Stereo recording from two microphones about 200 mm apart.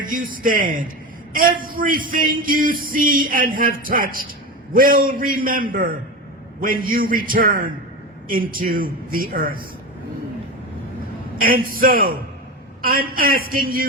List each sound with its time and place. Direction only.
0.0 s speech: 45° right (ahead or behind)
0.4 s music: 45° right (ahead or behind)
1.3 s a man's voice: 45° right (ahead or behind)
1.6 s music: 45° right (ahead or behind)
11.3 s music: 45° right (ahead or behind)